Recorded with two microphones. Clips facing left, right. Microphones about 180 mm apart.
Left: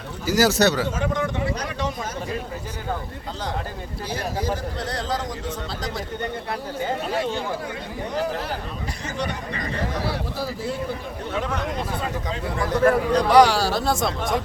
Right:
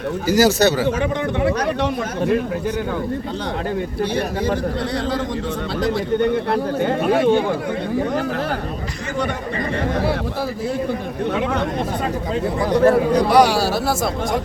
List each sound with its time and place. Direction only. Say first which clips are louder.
0.3 s speech: right 3 dB; centre (ahead or behind)
0.9 s speech: right 4 dB; 65° right (ahead or behind)
5.8 s speech: right 13 dB; 65° right (ahead or behind)
9.9 s speech: right 9 dB; 55° right (ahead or behind)
12.5 s speech: right 4 dB; 15° right (ahead or behind)